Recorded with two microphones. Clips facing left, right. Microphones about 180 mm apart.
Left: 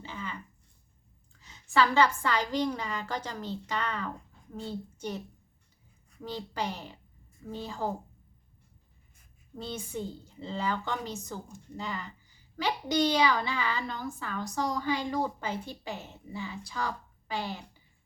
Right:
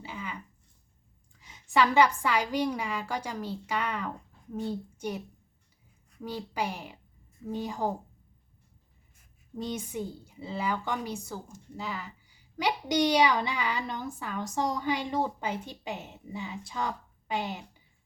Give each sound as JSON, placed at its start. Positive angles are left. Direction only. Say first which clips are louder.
{"t": 0.0, "sound": "a sound", "louder": "even", "side_deg": -10}
{"t": 1.3, "sound": "a child's voice", "louder": "right 2 dB", "side_deg": -15}
{"t": 6.2, "sound": "a child's voice", "louder": "right 1 dB", "side_deg": -10}
{"t": 9.6, "sound": "a child's voice", "louder": "right 3 dB", "side_deg": -15}
{"t": 12.5, "sound": "a child's voice", "louder": "right 1 dB", "side_deg": -15}